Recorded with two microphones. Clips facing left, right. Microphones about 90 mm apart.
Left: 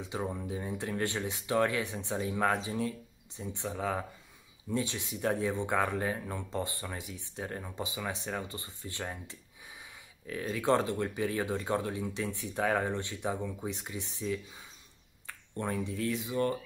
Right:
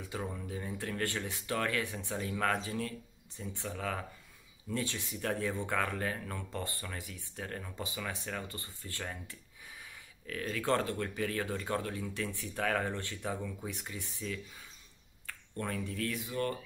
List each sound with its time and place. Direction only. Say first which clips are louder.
0.0 s speech: left 4 dB; 20° left (ahead or behind)